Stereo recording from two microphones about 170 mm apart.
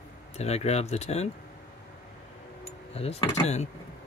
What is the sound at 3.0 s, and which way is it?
Speech, 35° left (ahead or behind).